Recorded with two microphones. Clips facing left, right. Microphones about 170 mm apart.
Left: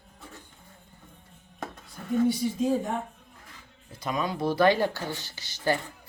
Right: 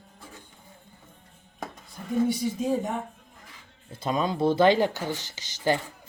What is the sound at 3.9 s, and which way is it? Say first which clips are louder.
Speech: right 3 dB; 25° right (ahead or behind).